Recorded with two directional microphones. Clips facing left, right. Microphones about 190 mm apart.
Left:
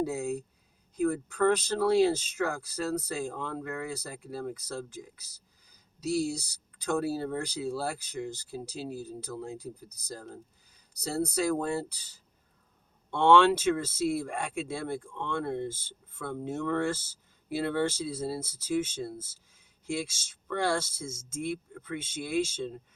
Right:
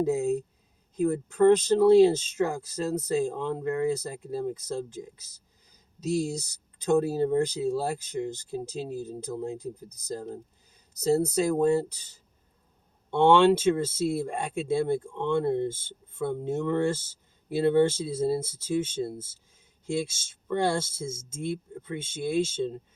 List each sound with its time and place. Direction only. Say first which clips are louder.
0.0 s speech: right 6 dB; 25° right (ahead or behind)
13.1 s speech: right 3 dB; 25° right (ahead or behind)